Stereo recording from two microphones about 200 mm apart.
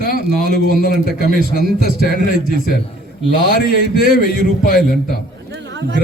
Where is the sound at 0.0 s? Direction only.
45° left (ahead or behind).